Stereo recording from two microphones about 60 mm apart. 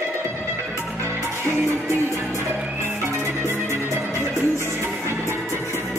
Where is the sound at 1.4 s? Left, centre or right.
Right.